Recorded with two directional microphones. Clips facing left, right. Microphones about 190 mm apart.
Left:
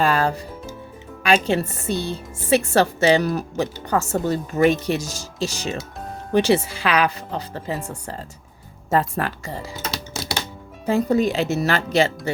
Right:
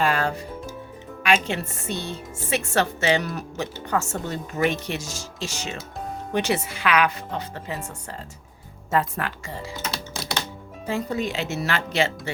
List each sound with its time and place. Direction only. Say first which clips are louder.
0.0 s music: left 3 dB; 35° left (ahead or behind)
1.2 s a woman's voice: left 4 dB; 35° left (ahead or behind)